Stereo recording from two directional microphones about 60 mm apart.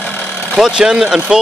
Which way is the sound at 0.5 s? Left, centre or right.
Centre.